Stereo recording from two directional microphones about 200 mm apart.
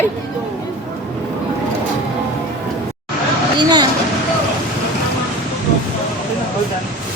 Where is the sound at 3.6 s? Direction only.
20° right (ahead or behind).